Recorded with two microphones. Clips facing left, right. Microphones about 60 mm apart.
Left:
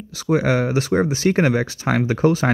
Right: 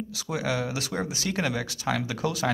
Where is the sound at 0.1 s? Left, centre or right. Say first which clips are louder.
Left 12 dB; left.